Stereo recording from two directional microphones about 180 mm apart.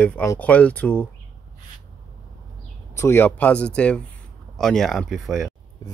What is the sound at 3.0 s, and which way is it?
Speech, 10° left (ahead or behind).